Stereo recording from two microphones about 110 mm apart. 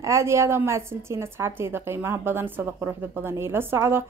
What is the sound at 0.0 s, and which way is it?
A woman's voice, 25° right (ahead or behind).